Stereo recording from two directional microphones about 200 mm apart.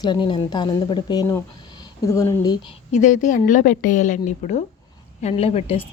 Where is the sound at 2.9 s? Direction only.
40° left (ahead or behind).